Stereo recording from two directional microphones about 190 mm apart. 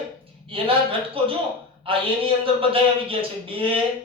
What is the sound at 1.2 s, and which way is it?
Speech, 30° right (ahead or behind).